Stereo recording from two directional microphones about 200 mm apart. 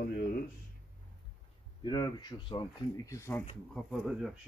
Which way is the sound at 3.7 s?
Centre (ahead or behind).